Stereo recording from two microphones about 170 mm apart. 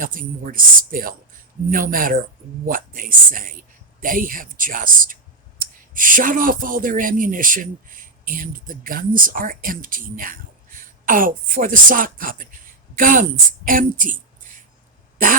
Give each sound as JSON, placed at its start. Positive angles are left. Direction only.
{"t": 0.0, "sound": "a man's voice", "side_deg": -55}